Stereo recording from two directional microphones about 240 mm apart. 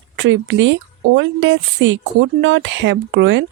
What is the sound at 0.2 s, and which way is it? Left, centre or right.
Speech, right.